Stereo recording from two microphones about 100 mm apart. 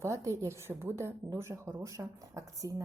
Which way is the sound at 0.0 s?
30° right (ahead or behind).